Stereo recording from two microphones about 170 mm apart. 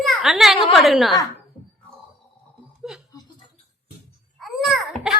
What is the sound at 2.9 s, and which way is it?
Chuckle, 5° right (ahead or behind).